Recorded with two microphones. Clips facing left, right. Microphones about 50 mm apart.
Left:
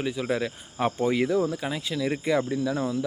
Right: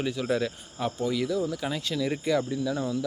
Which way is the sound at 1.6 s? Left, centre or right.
Centre.